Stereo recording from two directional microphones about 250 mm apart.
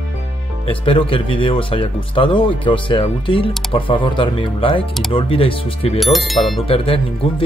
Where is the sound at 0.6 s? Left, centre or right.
Left.